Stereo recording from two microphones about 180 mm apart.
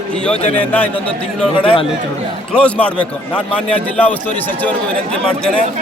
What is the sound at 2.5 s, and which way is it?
Speech, 5° left (ahead or behind).